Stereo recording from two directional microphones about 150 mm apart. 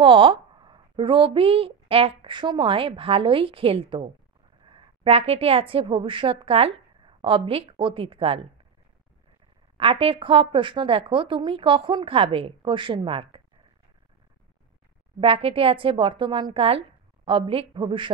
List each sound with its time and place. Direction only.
0.0 s a woman's voice: 35° right (ahead or behind)
9.8 s speech: 35° right (ahead or behind)
15.1 s speech: 35° right (ahead or behind)